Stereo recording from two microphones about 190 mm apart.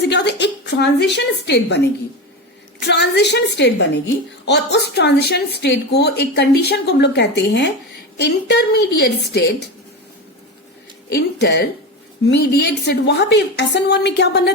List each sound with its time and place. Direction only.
0.0 s speech: 65° left (ahead or behind)
11.1 s speech: 60° left (ahead or behind)